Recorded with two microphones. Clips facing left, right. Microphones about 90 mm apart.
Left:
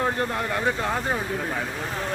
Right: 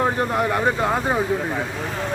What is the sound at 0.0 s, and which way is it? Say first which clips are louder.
Speech: right 5 dB; 20° right (ahead or behind).